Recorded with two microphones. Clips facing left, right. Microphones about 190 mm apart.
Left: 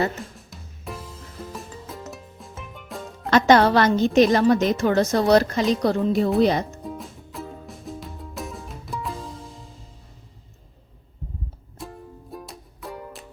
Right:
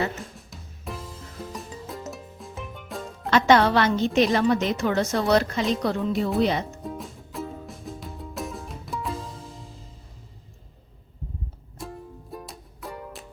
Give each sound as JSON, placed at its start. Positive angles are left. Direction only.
{"t": 0.3, "sound": "music", "side_deg": 0}
{"t": 3.2, "sound": "a woman's voice", "side_deg": 40}
{"t": 6.8, "sound": "music", "side_deg": 0}
{"t": 11.8, "sound": "music", "side_deg": 0}